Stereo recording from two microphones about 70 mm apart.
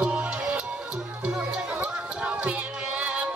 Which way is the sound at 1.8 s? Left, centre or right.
Right.